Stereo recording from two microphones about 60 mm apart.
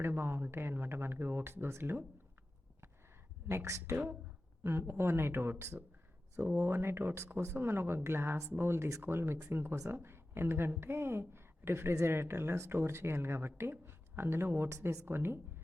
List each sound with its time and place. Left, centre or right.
0.0 s speech: right
3.5 s speech: right
3.9 s speech: right